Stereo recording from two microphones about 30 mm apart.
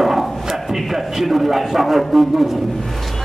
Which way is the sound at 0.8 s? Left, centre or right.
Centre.